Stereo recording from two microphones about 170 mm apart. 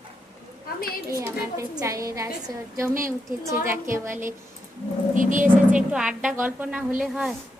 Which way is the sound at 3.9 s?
15° right (ahead or behind).